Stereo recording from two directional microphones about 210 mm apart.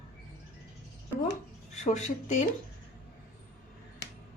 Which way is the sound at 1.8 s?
35° left (ahead or behind).